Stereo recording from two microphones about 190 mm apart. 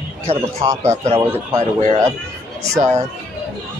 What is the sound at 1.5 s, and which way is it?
Speech, 30° right (ahead or behind).